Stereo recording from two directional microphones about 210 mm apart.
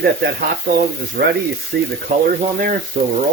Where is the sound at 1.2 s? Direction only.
50° right (ahead or behind).